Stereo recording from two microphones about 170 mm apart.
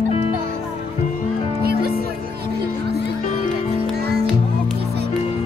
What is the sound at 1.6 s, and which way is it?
Music, 65° right (ahead or behind).